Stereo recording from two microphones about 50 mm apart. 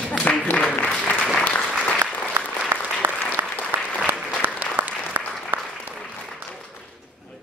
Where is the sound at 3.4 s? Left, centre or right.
Right.